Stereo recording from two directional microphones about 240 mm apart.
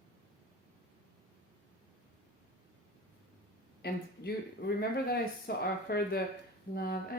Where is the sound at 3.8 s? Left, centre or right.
Left.